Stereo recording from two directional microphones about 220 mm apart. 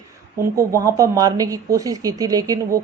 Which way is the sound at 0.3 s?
15° right (ahead or behind).